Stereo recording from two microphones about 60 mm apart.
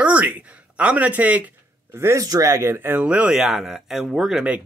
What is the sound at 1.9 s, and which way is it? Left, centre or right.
Speech, right.